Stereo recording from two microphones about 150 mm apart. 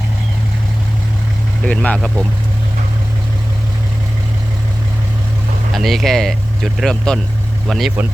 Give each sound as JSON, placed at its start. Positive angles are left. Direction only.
{"t": 1.6, "sound": "speech", "side_deg": 10}
{"t": 5.7, "sound": "speech", "side_deg": 0}